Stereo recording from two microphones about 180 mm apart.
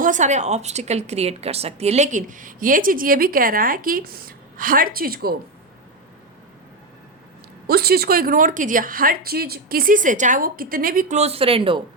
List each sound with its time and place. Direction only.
0.0 s a woman's voice: 45° right (ahead or behind)
7.7 s a woman's voice: 60° right (ahead or behind)
11.2 s speech: 30° right (ahead or behind)